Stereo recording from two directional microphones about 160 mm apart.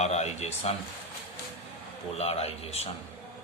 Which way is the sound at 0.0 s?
45° left (ahead or behind).